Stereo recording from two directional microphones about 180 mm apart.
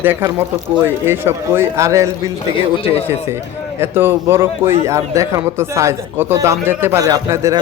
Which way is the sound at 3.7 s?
15° right (ahead or behind).